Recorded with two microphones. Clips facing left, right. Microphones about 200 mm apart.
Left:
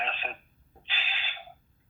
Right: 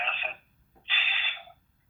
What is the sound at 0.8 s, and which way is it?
Gasp, 40° left (ahead or behind).